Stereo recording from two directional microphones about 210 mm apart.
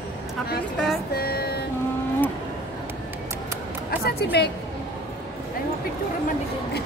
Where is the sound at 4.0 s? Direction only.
50° left (ahead or behind).